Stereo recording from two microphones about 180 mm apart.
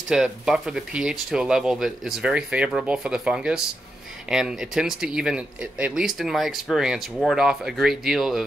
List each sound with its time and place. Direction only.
0.1 s speech: 5° right (ahead or behind)